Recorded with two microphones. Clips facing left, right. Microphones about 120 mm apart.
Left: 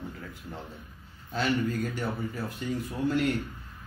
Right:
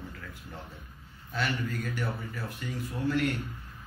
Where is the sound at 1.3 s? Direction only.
30° left (ahead or behind).